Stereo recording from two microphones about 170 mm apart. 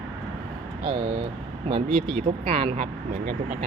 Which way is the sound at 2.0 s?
35° right (ahead or behind).